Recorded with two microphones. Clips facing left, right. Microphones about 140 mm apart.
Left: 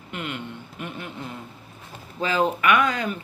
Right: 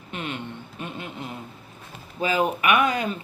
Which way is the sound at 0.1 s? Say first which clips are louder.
Even; 20° right (ahead or behind).